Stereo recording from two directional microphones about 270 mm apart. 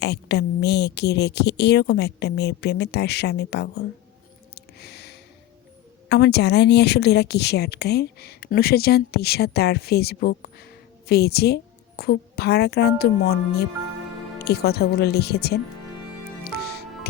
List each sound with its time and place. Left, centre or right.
0.0 s speech: left
4.5 s a sound: left
6.1 s speech: left
16.4 s music: left